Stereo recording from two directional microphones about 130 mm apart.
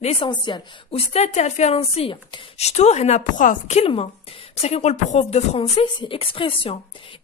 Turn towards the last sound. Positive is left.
turn(degrees=45)  # may be behind; listen again after turning